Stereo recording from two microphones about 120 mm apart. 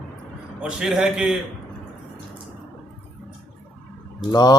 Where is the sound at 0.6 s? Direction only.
5° right (ahead or behind).